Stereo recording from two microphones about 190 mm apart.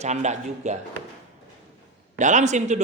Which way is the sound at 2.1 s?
40° right (ahead or behind).